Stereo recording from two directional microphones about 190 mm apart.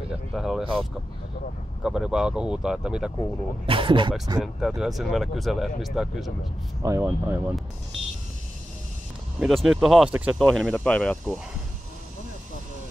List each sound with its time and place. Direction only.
0.1 s speech: centre (ahead or behind)
3.6 s speech: 25° right (ahead or behind)
4.4 s speech: centre (ahead or behind)
6.8 s speech: 15° right (ahead or behind)
9.4 s speech: centre (ahead or behind)